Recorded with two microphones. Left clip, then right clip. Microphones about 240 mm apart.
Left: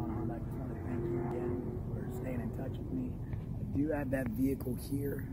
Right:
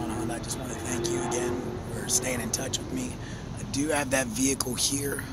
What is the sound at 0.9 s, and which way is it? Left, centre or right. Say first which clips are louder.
Speech: right 8 dB; right.